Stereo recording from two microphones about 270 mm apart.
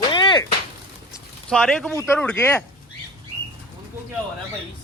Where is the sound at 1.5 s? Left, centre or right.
Centre.